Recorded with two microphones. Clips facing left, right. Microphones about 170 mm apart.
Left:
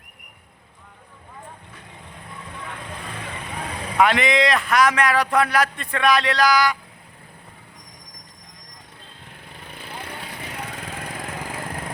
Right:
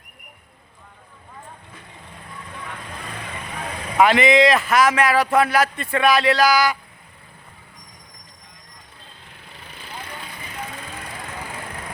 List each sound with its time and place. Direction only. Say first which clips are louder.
3.9 s a man's voice: right 4 dB; centre (ahead or behind)
9.6 s vehicle: left 1 dB; 55° left (ahead or behind)